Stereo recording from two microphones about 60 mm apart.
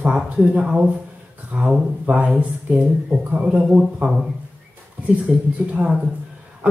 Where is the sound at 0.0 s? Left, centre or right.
Right.